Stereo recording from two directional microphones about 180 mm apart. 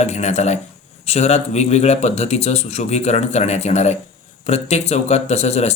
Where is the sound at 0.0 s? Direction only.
40° left (ahead or behind).